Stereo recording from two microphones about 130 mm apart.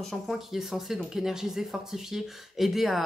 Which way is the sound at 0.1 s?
Centre (ahead or behind).